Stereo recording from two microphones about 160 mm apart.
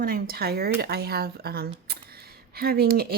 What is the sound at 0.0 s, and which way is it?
Speech, 70° right (ahead or behind).